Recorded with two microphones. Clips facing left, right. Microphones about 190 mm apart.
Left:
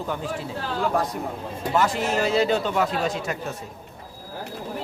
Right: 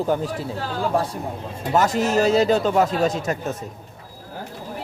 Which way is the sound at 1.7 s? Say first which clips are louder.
Right 4 dB; 40° right (ahead or behind).